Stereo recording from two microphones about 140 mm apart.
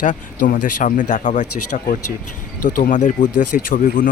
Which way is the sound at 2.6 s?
85° left.